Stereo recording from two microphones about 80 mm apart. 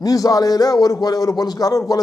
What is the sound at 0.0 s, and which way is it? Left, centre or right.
A man's voice, left.